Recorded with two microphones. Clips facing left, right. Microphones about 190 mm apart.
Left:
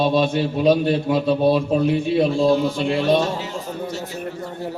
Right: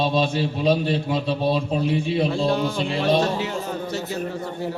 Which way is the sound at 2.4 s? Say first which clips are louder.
Left 4 dB; 60° right (ahead or behind).